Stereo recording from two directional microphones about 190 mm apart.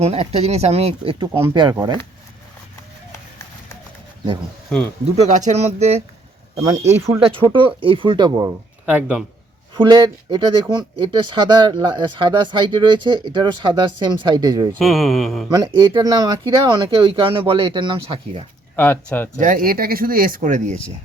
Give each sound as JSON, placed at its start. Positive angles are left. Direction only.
{"t": 0.0, "sound": "speech", "side_deg": -30}
{"t": 5.1, "sound": "speech", "side_deg": -40}
{"t": 6.6, "sound": "speech", "side_deg": -15}
{"t": 7.3, "sound": "speech", "side_deg": -25}
{"t": 8.4, "sound": "speech", "side_deg": -10}
{"t": 9.7, "sound": "speech", "side_deg": -25}
{"t": 14.8, "sound": "speech", "side_deg": 0}
{"t": 15.4, "sound": "speech", "side_deg": -20}
{"t": 18.8, "sound": "speech", "side_deg": 10}
{"t": 19.4, "sound": "speech", "side_deg": -45}